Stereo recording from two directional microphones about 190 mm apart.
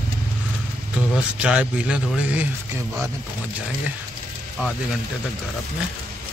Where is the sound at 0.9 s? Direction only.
5° right (ahead or behind).